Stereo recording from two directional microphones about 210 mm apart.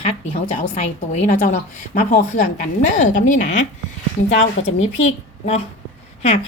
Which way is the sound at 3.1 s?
35° left (ahead or behind).